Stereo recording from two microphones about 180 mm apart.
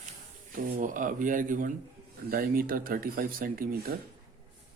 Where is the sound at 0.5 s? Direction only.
50° right (ahead or behind).